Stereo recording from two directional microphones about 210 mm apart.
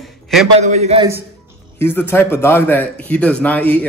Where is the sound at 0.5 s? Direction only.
35° right (ahead or behind).